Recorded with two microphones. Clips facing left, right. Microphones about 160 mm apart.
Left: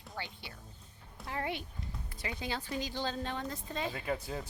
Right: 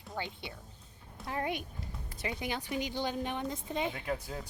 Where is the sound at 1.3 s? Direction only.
20° right (ahead or behind).